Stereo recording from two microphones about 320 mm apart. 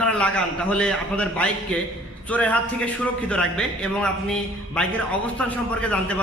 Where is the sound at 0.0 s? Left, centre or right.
Centre.